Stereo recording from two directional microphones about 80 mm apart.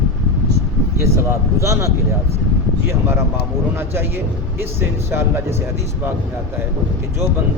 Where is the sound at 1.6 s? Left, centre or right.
Right.